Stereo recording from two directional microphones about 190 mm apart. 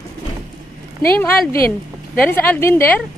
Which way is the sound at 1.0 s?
10° left (ahead or behind).